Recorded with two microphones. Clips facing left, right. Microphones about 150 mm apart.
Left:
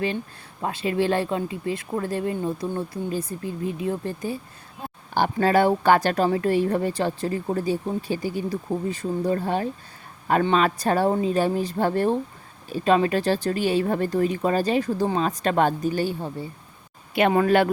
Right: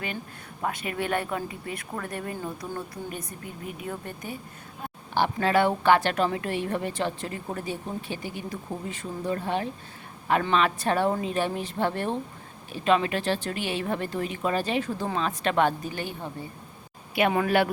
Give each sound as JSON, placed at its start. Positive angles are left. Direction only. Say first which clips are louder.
{"t": 0.6, "sound": "speech", "louder": "left 6 dB", "side_deg": 30}
{"t": 5.1, "sound": "a woman's voice", "louder": "left 3 dB", "side_deg": 40}
{"t": 17.2, "sound": "speech", "louder": "left 4 dB", "side_deg": 50}